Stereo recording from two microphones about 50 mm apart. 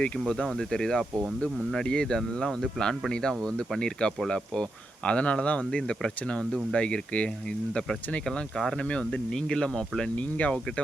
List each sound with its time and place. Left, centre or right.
0.0 s speech: centre
8.2 s speech: centre
10.2 s speech: left